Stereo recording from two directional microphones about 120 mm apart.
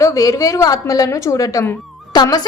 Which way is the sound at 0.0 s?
30° left (ahead or behind).